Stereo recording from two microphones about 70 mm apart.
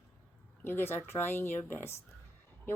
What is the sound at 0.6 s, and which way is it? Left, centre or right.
A woman's voice, left.